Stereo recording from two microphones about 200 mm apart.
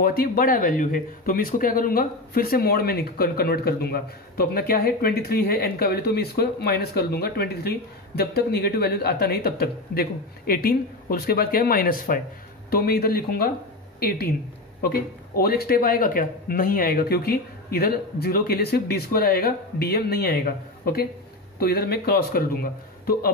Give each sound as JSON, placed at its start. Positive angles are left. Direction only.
{"t": 0.0, "sound": "speech", "side_deg": 45}